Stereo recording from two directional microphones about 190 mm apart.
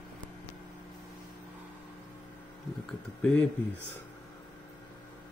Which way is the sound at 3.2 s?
5° left (ahead or behind).